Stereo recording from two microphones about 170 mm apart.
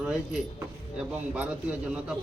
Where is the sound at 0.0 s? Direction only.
5° right (ahead or behind).